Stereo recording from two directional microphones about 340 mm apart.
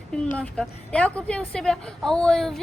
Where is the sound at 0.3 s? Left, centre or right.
Centre.